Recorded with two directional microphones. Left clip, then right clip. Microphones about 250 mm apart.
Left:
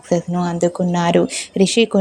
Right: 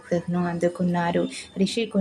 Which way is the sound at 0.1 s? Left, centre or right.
Left.